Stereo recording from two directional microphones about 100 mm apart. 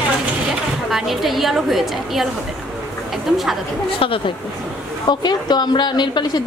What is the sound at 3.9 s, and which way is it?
Speech, 60° left (ahead or behind).